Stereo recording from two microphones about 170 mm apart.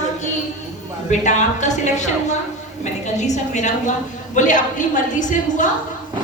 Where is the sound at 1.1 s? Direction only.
45° left (ahead or behind).